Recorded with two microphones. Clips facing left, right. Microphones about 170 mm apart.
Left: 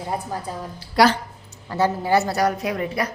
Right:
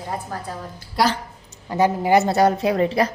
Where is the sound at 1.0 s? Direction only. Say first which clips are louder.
Left 3 dB; 80° left.